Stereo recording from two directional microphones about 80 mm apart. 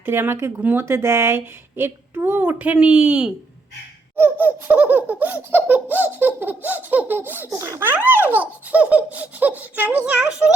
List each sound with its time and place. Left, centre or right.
0.0 s laughter: right
0.9 s a woman's voice: right
2.4 s laughter: centre
2.7 s speech: centre
4.2 s laughter: right